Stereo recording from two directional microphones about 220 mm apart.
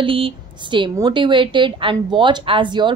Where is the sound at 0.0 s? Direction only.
25° right (ahead or behind).